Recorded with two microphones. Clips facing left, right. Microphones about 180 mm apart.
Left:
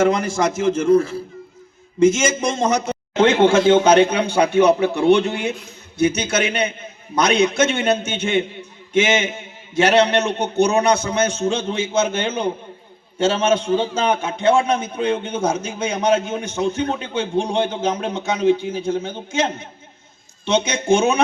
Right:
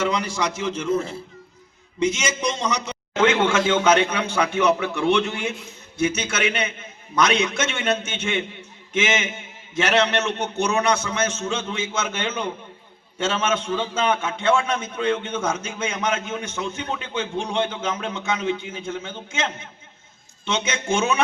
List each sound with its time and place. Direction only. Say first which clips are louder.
0.0 s a man's voice: left 6 dB; 50° left (ahead or behind)
0.9 s a man's voice: left 8 dB; 25° right (ahead or behind)
2.0 s a man's voice: left 8 dB; 50° left (ahead or behind)
3.2 s a man's voice: left 5 dB; 30° left (ahead or behind)